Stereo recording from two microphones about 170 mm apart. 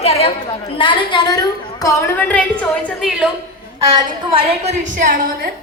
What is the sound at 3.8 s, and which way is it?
Speech, 25° right (ahead or behind).